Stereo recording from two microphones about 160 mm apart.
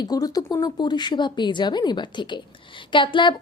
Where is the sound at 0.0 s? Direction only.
25° left (ahead or behind).